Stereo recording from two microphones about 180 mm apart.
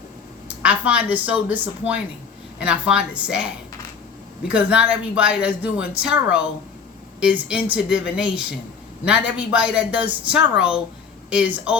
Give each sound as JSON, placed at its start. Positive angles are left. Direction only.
{"t": 0.6, "sound": "speech", "side_deg": -5}
{"t": 4.4, "sound": "speech", "side_deg": -5}